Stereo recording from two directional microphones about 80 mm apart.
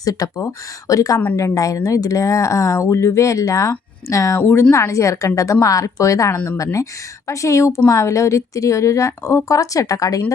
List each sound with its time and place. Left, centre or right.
0.0 s speech: left